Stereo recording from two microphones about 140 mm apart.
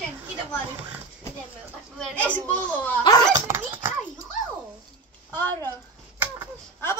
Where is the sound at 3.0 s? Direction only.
30° left (ahead or behind).